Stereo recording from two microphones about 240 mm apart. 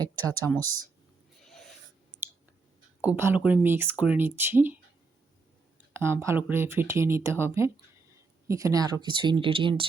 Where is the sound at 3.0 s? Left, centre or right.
Centre.